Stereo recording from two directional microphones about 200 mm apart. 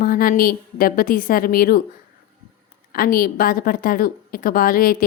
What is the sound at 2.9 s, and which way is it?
A woman's voice, 45° left (ahead or behind).